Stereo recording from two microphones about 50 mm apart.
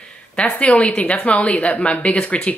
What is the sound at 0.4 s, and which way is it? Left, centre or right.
A woman's voice, left.